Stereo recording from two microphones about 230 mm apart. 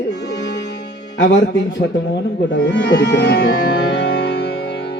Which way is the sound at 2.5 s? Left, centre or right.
Left.